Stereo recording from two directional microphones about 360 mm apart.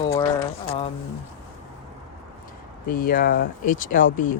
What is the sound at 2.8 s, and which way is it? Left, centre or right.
Speech, left.